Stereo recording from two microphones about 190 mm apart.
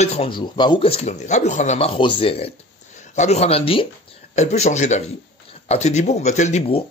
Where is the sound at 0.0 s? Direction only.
30° left (ahead or behind).